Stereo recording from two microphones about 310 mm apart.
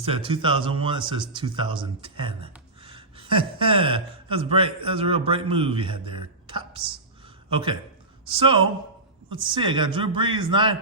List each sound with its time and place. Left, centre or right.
0.0 s speech: centre